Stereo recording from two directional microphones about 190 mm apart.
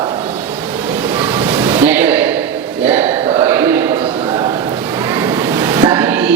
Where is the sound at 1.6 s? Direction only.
10° right (ahead or behind).